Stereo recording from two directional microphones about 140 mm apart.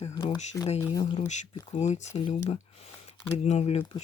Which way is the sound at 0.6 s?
10° left (ahead or behind).